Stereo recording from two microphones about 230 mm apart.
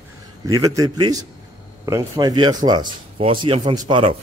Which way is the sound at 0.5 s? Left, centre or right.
Centre.